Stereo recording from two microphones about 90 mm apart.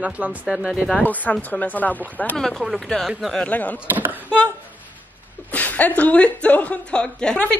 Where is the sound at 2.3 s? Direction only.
5° left (ahead or behind).